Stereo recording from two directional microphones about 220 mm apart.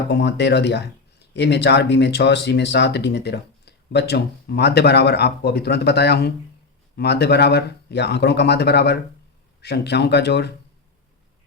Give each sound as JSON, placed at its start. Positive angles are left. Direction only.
{"t": 0.1, "sound": "speech", "side_deg": 50}